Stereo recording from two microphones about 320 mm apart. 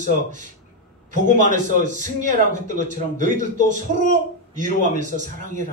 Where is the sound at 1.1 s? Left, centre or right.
Right.